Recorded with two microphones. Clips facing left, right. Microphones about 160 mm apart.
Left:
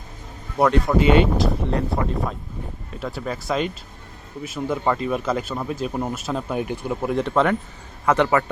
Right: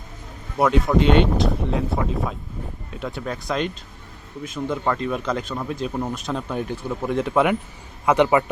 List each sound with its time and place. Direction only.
0.6 s speech: centre (ahead or behind)
7.1 s a man's voice: 5° right (ahead or behind)